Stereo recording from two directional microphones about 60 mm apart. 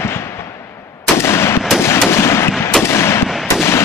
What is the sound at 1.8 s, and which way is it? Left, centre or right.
Fireworks, left.